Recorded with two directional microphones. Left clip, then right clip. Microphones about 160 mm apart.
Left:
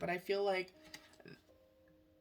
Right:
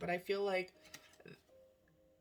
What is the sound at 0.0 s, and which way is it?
Speech, 45° left (ahead or behind).